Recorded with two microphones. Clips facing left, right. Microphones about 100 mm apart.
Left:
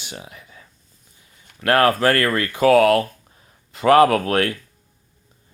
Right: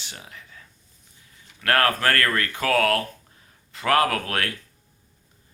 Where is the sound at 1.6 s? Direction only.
20° left (ahead or behind).